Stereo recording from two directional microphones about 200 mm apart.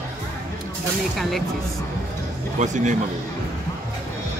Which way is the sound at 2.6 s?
35° right (ahead or behind).